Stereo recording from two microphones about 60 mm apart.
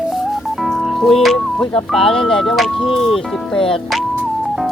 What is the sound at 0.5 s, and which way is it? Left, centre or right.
Music, centre.